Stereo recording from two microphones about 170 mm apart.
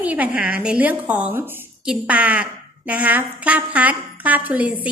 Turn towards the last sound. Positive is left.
turn(degrees=-10)  # may be behind; listen again after turning